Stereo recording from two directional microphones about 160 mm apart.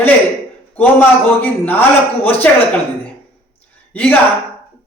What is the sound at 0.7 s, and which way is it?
A man's voice, 10° left (ahead or behind).